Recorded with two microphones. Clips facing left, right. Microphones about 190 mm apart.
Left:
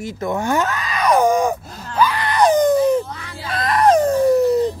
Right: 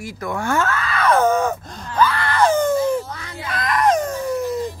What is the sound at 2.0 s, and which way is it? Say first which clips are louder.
Screaming: left 1 dB; 15° left (ahead or behind).